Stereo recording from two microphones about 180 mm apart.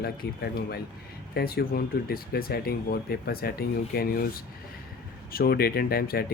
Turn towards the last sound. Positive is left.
turn(degrees=55)  # may be behind; listen again after turning